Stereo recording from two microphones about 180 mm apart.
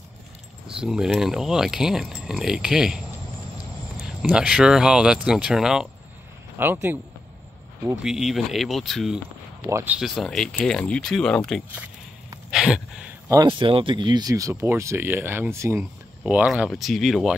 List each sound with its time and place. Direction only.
0.7 s speech: 5° right (ahead or behind)
4.0 s speech: 5° right (ahead or behind)
8.0 s speech: 5° right (ahead or behind)
9.7 s speech: 15° right (ahead or behind)
9.9 s speech: centre (ahead or behind)
12.4 s a sound: 5° right (ahead or behind)
13.3 s speech: 25° right (ahead or behind); by 17.4 s centre (ahead or behind)